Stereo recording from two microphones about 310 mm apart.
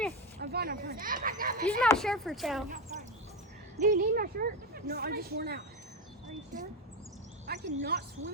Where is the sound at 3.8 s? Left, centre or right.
Right.